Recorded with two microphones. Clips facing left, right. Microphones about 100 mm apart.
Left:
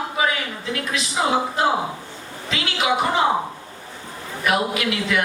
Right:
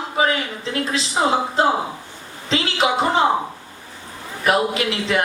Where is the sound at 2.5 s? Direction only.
30° right (ahead or behind).